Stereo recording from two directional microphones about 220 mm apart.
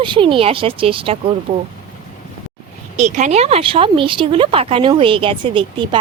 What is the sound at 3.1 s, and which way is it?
Speech, 30° right (ahead or behind).